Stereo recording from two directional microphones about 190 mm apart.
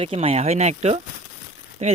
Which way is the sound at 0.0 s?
30° right (ahead or behind).